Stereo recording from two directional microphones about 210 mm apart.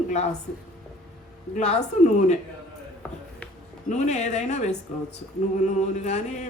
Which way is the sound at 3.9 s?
35° left (ahead or behind).